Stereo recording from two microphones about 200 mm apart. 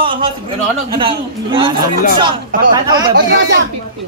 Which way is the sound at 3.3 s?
65° right (ahead or behind).